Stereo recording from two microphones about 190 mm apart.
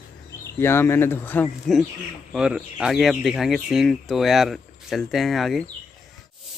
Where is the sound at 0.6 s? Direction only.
10° left (ahead or behind).